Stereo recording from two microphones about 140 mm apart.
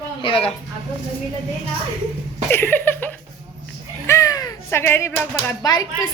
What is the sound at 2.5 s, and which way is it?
Laughter, 15° left (ahead or behind).